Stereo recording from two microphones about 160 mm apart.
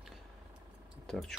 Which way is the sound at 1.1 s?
5° left (ahead or behind).